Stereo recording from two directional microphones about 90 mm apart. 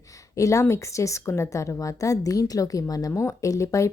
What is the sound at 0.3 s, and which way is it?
A woman's voice, 35° left (ahead or behind).